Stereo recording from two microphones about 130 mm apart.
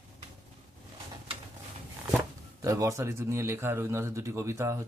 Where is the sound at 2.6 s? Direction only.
25° right (ahead or behind).